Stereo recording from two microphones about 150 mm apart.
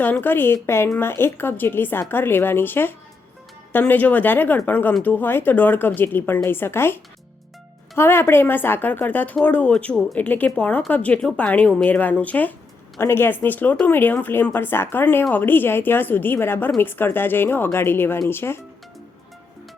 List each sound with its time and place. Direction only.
0.0 s speech: 15° left (ahead or behind)